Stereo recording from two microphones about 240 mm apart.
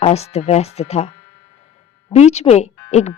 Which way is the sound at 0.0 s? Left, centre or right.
Left.